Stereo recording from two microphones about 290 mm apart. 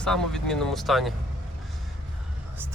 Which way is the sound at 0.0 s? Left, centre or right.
Centre.